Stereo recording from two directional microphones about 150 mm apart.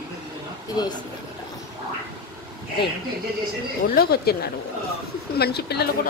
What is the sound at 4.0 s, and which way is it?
Speech, 90° left.